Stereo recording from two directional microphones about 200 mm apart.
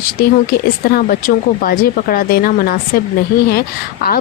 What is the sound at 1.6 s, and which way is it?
Speech, 45° left (ahead or behind).